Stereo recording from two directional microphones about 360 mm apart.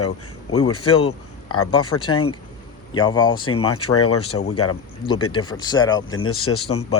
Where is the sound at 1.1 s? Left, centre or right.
Left.